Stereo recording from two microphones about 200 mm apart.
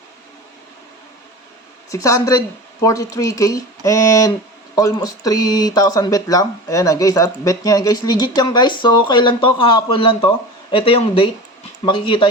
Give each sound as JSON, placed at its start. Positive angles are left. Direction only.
{"t": 1.9, "sound": "speech", "side_deg": 15}